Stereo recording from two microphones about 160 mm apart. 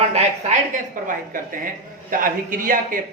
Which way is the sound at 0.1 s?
50° right (ahead or behind).